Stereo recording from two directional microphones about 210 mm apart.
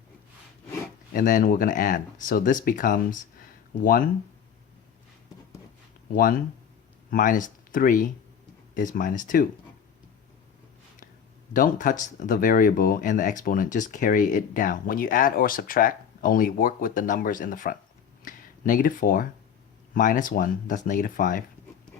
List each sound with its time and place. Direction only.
1.1 s speech: 40° left (ahead or behind)
6.1 s speech: 40° left (ahead or behind)
11.5 s speech: 40° left (ahead or behind)
18.2 s a sound: 40° left (ahead or behind)
19.9 s speech: 40° left (ahead or behind)